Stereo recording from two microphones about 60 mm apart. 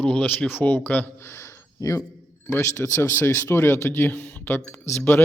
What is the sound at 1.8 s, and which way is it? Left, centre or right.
Speech, left.